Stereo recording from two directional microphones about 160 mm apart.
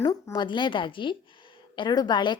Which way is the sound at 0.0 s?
25° left (ahead or behind).